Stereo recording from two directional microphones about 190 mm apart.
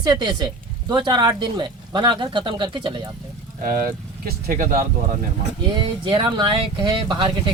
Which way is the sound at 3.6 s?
50° right (ahead or behind).